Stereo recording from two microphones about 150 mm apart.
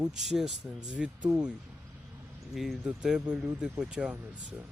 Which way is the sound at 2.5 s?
Centre (ahead or behind).